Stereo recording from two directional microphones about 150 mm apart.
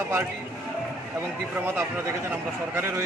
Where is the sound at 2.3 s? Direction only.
15° right (ahead or behind).